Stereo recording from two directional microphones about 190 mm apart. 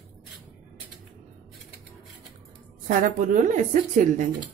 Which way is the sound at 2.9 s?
45° right (ahead or behind).